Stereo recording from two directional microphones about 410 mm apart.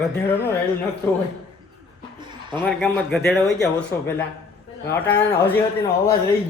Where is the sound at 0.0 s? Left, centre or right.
Centre.